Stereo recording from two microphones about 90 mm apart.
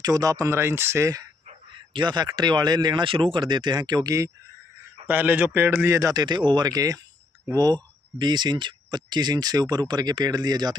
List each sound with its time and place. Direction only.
0.0 s speech: 40° right (ahead or behind)
1.7 s speech: 60° right (ahead or behind); by 4.3 s 40° right (ahead or behind)
5.0 s a man's voice: 20° right (ahead or behind); by 6.2 s 40° right (ahead or behind)
6.2 s speech: 55° right (ahead or behind)